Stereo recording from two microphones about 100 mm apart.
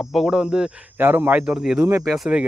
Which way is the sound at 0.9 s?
20° right (ahead or behind).